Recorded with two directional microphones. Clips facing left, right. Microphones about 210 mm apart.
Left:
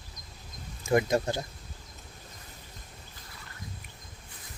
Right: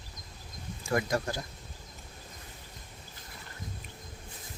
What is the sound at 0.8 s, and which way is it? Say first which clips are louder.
Speech: left 5 dB; 20° left (ahead or behind).